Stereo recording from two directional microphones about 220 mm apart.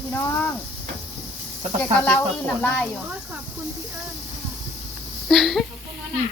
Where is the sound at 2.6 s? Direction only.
5° left (ahead or behind).